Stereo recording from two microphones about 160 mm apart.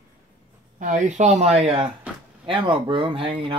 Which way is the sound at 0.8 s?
50° right (ahead or behind).